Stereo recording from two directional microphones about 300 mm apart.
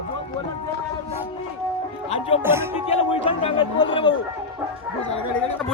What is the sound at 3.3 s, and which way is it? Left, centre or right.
Speech, centre.